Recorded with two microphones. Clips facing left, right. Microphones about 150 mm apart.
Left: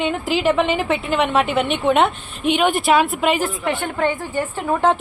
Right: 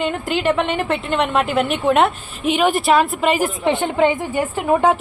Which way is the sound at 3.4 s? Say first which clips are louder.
Right 4 dB; 20° right (ahead or behind).